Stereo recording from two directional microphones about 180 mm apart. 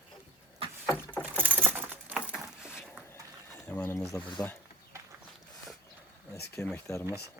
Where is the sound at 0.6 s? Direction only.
30° right (ahead or behind).